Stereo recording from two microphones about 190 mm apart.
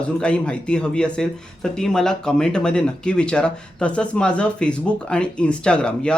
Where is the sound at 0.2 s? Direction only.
5° left (ahead or behind).